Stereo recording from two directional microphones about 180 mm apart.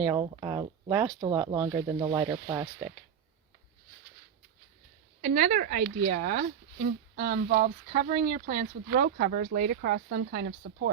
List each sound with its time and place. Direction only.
0.2 s speech: 25° right (ahead or behind)
5.2 s speech: 45° right (ahead or behind); by 10.8 s 70° right (ahead or behind)